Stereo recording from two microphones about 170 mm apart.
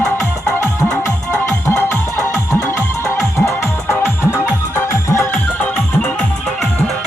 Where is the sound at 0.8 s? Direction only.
20° left (ahead or behind).